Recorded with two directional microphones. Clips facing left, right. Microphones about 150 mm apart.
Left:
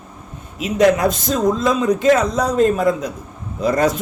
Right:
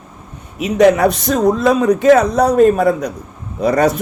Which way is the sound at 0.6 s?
65° right (ahead or behind).